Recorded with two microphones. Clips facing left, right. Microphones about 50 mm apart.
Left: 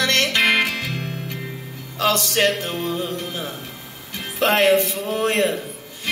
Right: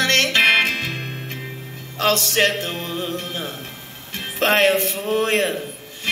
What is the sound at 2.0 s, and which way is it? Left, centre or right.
Music, right.